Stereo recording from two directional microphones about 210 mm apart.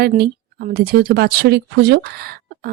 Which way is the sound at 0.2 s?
45° right (ahead or behind).